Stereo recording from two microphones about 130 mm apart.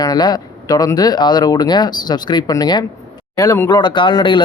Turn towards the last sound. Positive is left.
turn(degrees=35)  # may be behind; listen again after turning